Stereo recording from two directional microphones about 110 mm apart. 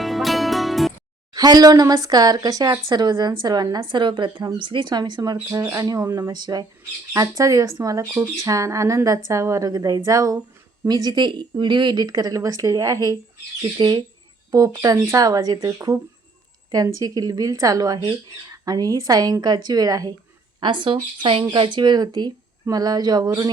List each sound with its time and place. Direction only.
0.0 s music: centre (ahead or behind)
1.3 s a woman's voice: 35° right (ahead or behind)
5.5 s speech: 25° right (ahead or behind)
20.6 s a woman's voice: 45° right (ahead or behind)